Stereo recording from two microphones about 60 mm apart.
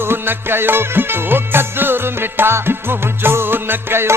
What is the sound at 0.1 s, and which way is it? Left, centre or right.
Music, right.